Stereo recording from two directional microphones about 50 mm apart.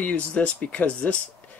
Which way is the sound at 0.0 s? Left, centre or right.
Left.